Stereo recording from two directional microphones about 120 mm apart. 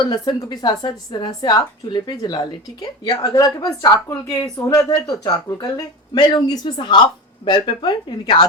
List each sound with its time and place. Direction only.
0.0 s speech: 35° left (ahead or behind)